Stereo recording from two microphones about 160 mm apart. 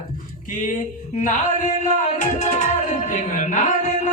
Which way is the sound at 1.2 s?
50° left (ahead or behind).